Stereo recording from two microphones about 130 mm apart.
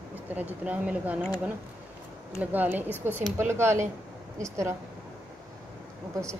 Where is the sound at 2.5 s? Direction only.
15° right (ahead or behind).